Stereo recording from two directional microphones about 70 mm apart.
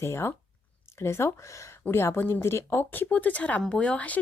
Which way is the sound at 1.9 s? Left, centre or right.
Left.